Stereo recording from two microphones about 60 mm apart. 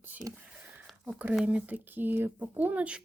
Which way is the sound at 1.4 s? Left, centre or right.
Right.